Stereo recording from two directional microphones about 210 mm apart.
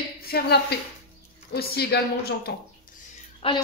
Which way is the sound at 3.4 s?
25° left (ahead or behind).